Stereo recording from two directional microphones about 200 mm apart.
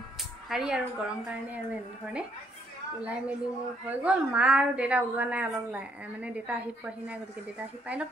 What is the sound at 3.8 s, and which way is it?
A woman's voice, 5° right (ahead or behind).